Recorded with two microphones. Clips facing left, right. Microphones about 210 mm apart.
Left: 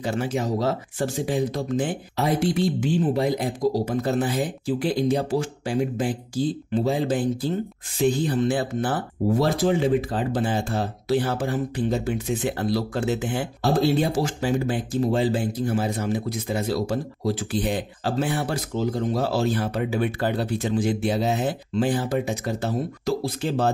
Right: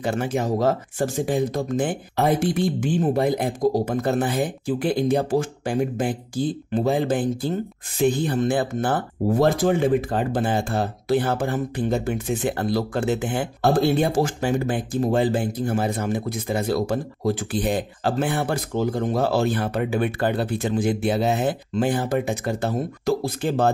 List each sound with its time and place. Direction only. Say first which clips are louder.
0.0 s speech: right 2 dB; 55° right (ahead or behind)